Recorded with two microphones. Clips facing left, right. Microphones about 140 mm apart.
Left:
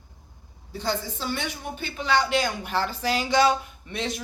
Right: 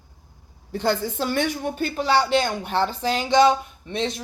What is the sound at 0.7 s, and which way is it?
A woman's voice, 55° right (ahead or behind).